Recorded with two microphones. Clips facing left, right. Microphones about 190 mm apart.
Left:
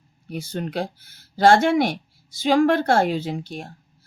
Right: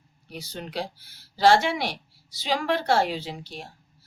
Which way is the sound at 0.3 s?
50° left (ahead or behind).